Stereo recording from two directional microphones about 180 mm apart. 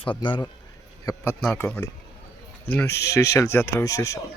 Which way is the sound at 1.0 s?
15° left (ahead or behind).